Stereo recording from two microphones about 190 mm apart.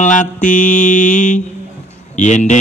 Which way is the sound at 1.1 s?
40° left (ahead or behind).